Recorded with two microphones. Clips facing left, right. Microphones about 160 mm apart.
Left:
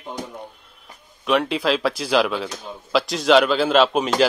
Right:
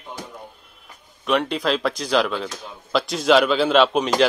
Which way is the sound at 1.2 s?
Centre (ahead or behind).